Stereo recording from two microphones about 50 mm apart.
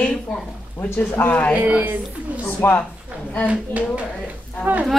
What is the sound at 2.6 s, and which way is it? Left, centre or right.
Speech, left.